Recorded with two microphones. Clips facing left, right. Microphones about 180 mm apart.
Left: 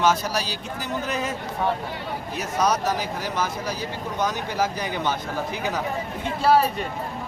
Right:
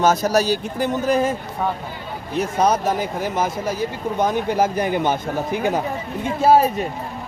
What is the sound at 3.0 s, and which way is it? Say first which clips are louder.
Speech: right 5 dB; 50° right (ahead or behind).